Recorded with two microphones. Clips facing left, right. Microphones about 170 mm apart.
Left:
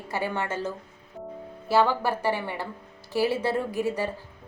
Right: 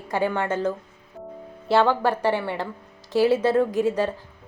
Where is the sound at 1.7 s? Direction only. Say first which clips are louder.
Right 3 dB; 10° left (ahead or behind).